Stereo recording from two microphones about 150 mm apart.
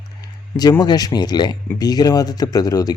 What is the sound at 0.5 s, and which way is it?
Speech, 25° left (ahead or behind).